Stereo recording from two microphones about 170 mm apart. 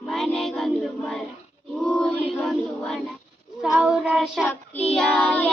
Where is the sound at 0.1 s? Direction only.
Centre (ahead or behind).